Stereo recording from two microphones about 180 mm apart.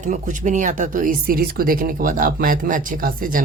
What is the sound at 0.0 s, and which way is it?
Speech, 45° right (ahead or behind).